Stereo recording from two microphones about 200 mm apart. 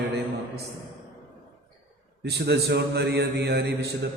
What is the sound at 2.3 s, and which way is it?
A man's voice, 55° right (ahead or behind).